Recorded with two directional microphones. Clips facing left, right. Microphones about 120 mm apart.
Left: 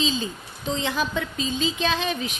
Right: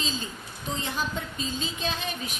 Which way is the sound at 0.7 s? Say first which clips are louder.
Left 6 dB; 90° left.